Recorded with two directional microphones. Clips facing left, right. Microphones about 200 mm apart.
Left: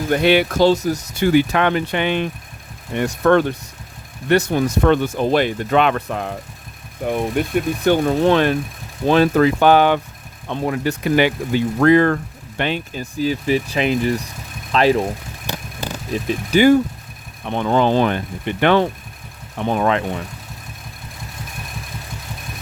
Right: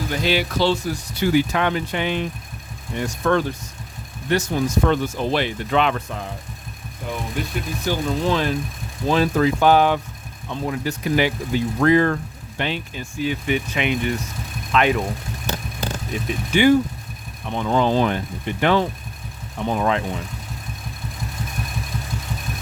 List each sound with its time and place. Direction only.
0.1 s speech: 60° left (ahead or behind); by 1.3 s 45° left (ahead or behind)
1.3 s speech: 65° left (ahead or behind); by 15.0 s 35° left (ahead or behind)
16.1 s speech: 40° left (ahead or behind)
17.5 s speech: 60° left (ahead or behind)